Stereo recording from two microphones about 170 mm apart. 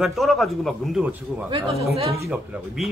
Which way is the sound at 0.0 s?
Centre (ahead or behind).